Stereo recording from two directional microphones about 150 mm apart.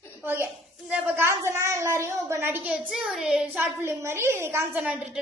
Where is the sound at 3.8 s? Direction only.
15° right (ahead or behind).